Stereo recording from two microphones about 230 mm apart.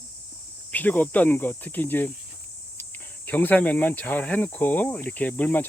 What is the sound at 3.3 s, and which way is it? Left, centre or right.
Speech, centre.